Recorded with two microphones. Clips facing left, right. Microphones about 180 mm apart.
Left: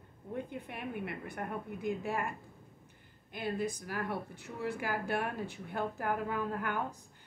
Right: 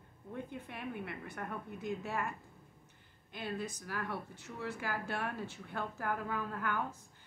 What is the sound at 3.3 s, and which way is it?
A woman's voice, 15° left (ahead or behind).